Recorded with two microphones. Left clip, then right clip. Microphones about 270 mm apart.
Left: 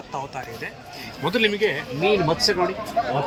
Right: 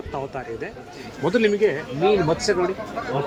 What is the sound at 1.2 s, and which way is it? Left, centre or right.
Speech, centre.